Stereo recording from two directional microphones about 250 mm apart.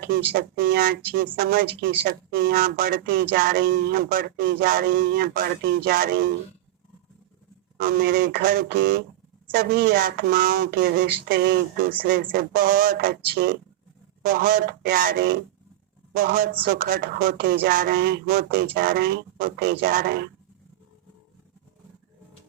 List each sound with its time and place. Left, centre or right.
0.3 s speech: right
7.8 s speech: right